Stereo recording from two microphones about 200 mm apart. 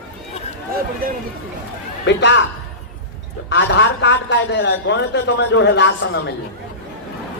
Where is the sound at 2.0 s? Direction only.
60° left (ahead or behind).